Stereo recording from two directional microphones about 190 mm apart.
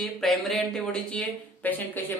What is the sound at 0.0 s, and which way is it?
Speech, centre (ahead or behind).